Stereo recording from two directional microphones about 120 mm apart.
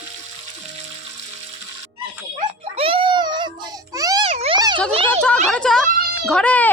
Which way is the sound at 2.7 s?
50° right (ahead or behind).